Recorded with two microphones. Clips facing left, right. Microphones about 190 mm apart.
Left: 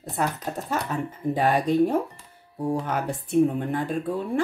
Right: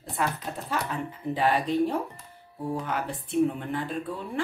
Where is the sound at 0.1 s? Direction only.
45° left (ahead or behind).